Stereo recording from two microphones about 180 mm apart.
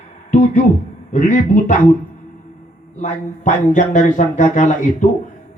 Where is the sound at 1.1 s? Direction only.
45° left (ahead or behind).